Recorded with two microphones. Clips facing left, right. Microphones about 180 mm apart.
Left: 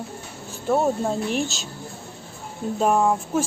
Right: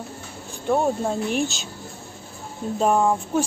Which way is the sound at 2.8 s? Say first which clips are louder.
Even; centre (ahead or behind).